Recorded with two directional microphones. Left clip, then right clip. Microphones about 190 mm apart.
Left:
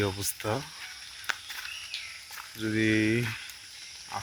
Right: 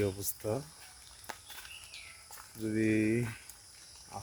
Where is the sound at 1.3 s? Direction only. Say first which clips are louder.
Left 13 dB; 30° right (ahead or behind).